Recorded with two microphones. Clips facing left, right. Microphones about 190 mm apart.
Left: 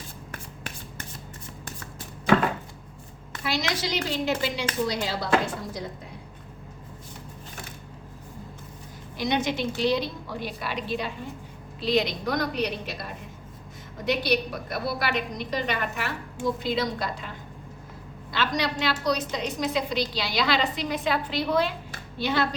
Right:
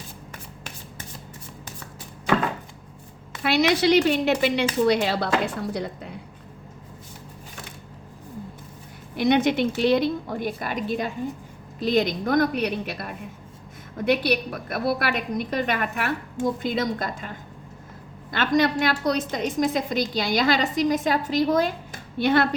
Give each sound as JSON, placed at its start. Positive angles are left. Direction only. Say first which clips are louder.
{"t": 3.4, "sound": "speech", "louder": "right 9 dB", "side_deg": -65}
{"t": 9.1, "sound": "a woman's voice", "louder": "right 7 dB", "side_deg": -60}